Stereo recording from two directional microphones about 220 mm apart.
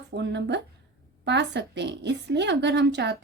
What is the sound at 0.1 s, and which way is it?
Speech, 50° right (ahead or behind).